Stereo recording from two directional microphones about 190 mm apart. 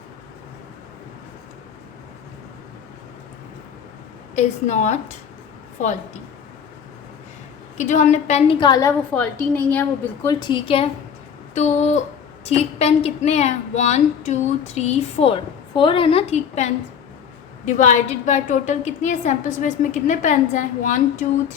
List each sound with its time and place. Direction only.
4.4 s a woman's voice: 40° left (ahead or behind)
7.8 s a woman's voice: 40° left (ahead or behind); by 9.8 s 10° left (ahead or behind)
10.2 s a woman's voice: 25° left (ahead or behind)
11.5 s a woman's voice: 40° left (ahead or behind)